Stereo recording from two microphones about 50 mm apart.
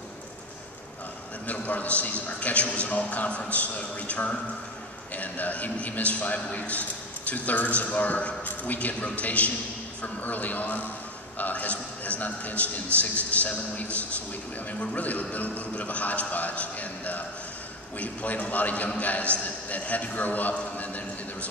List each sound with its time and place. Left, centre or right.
1.5 s a man's voice: left